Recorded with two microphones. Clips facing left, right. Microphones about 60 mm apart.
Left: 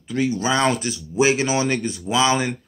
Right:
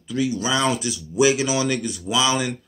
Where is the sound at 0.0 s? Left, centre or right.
Left.